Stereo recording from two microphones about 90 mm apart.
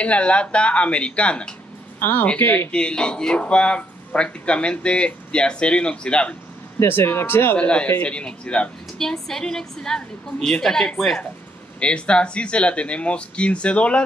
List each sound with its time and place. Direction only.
0.0 s a woman's voice: 15° left (ahead or behind)
2.0 s speech: 25° left (ahead or behind)
2.7 s a woman's voice: 10° left (ahead or behind)
6.8 s speech: 25° left (ahead or behind)
7.5 s a woman's voice: 15° left (ahead or behind)